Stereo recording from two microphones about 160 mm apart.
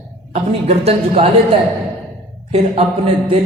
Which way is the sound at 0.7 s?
40° right (ahead or behind).